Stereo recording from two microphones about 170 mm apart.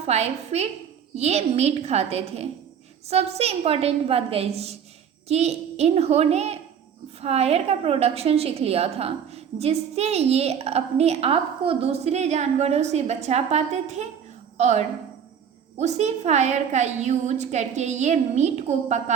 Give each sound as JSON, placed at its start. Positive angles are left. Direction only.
{"t": 0.0, "sound": "a woman's voice", "side_deg": -40}